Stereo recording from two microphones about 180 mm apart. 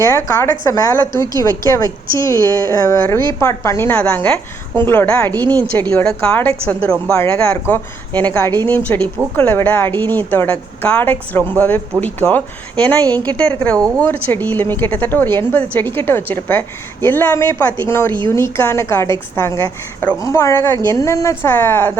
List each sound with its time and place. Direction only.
0.0 s a woman's voice: 15° left (ahead or behind)